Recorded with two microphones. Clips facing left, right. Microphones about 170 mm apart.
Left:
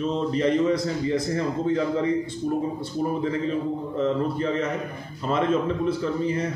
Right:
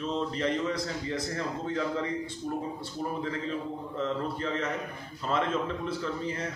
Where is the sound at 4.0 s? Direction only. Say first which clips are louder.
Left 7 dB; 15° left (ahead or behind).